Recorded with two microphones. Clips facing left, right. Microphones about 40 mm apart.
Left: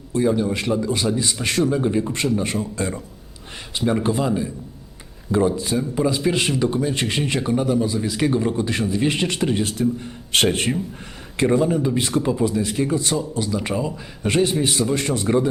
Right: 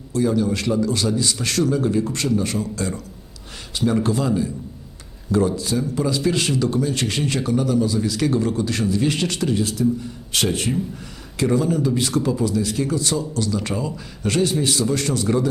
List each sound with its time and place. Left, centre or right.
0.1 s speech: left
11.3 s speech: left